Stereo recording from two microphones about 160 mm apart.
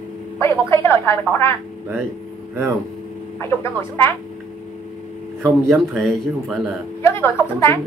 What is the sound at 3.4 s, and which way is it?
Speech, 15° left (ahead or behind).